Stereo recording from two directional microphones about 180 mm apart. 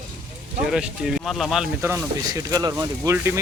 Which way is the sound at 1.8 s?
15° right (ahead or behind).